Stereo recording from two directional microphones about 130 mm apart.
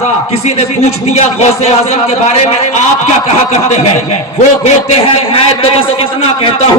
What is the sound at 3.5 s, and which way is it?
A man's voice, 60° left (ahead or behind).